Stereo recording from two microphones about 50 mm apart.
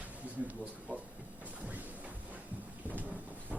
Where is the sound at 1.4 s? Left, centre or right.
Right.